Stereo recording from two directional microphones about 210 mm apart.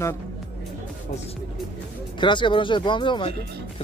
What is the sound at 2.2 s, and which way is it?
Speech, 20° left (ahead or behind).